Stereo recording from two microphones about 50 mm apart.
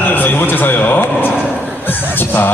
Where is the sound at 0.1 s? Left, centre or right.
Left.